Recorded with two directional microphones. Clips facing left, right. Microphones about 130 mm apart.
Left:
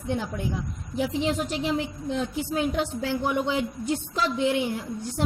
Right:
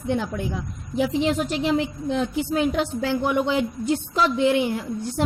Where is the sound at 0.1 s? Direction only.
85° right.